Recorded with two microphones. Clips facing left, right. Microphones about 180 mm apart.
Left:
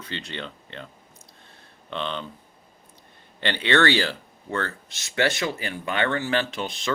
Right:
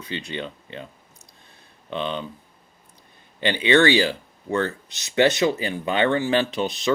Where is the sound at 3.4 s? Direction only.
15° right (ahead or behind).